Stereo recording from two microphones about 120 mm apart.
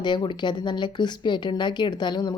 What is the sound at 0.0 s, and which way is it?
Speech, 40° left (ahead or behind).